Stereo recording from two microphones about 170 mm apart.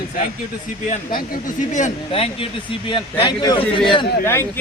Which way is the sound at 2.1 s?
30° left (ahead or behind).